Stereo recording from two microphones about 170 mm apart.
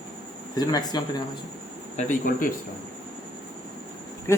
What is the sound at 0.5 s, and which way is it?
Speech, 25° left (ahead or behind).